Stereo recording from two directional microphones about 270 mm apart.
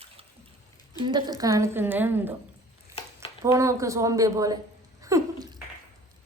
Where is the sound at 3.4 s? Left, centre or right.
Centre.